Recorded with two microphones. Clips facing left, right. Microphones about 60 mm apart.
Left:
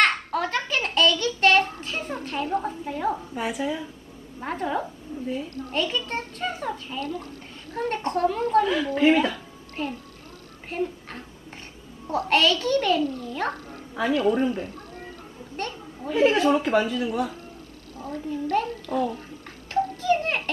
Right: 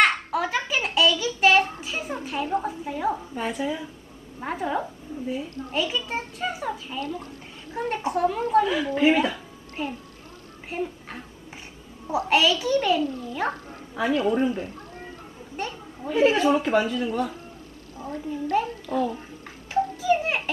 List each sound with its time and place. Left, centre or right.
0.0 s a sound: centre
2.2 s speech: centre
7.0 s speech: right
7.8 s a child's voice: centre
13.0 s a child's voice: right
13.3 s a child's voice: centre
15.5 s a woman's voice: centre
17.9 s a sound: right
18.3 s a child's voice: centre
18.9 s a child's voice: right
20.0 s a sound: centre